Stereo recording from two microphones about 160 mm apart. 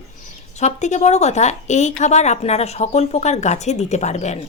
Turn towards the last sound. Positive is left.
turn(degrees=45)  # may be behind; listen again after turning